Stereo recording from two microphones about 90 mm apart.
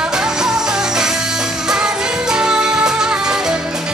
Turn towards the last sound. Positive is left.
turn(degrees=-5)  # may be behind; listen again after turning